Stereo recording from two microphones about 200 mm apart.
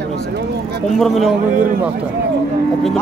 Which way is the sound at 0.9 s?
Centre (ahead or behind).